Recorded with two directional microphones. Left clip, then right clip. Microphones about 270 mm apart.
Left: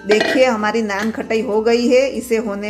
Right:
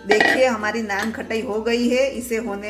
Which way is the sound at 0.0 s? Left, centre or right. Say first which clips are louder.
Left 2 dB; left.